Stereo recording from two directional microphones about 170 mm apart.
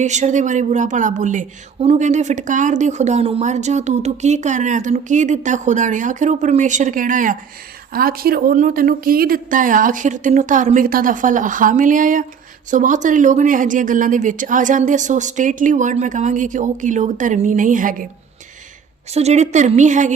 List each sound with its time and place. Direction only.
0.0 s speech: 45° right (ahead or behind)
19.1 s speech: 40° right (ahead or behind)